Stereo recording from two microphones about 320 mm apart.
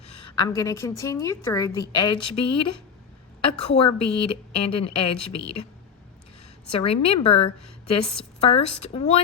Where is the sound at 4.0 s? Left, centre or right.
Left.